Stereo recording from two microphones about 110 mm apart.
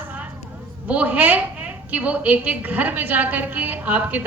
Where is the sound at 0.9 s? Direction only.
15° right (ahead or behind).